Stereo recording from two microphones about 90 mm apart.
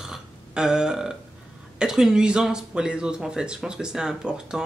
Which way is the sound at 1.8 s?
5° right (ahead or behind).